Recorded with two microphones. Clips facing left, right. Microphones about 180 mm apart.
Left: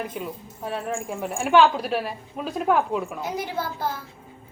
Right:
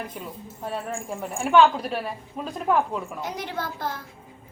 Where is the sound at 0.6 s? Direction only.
Centre (ahead or behind).